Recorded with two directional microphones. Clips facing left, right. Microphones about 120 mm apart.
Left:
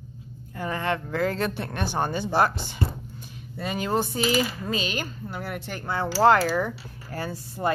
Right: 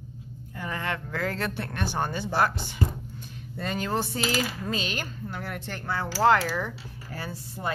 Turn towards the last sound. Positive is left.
turn(degrees=45)  # may be behind; listen again after turning